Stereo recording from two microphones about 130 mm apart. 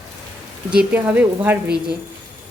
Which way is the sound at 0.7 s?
10° right (ahead or behind).